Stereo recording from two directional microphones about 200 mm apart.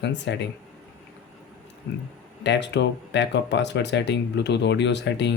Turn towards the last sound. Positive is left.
turn(degrees=60)  # may be behind; listen again after turning